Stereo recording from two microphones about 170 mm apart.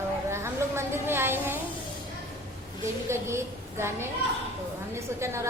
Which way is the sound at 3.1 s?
15° right (ahead or behind).